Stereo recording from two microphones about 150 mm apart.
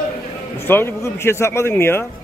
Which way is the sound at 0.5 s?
15° left (ahead or behind).